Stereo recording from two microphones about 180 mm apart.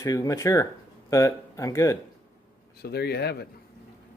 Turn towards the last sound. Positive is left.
turn(degrees=65)  # may be behind; listen again after turning